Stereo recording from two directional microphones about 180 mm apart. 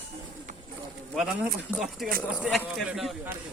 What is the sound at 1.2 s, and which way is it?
Speech, 5° right (ahead or behind).